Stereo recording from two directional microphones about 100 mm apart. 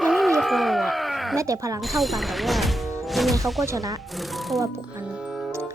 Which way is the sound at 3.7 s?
35° right (ahead or behind).